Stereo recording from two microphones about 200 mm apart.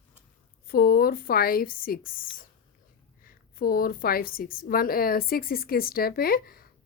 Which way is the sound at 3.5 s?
45° left (ahead or behind).